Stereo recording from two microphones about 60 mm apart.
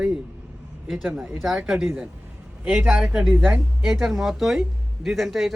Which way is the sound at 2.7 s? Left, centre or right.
Right.